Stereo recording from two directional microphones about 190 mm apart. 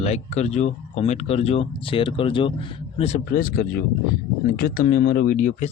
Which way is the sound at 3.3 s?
50° left (ahead or behind).